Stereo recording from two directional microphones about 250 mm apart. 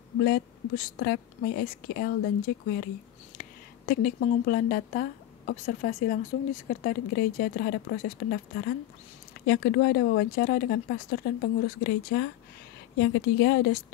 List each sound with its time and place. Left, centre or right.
0.2 s speech: left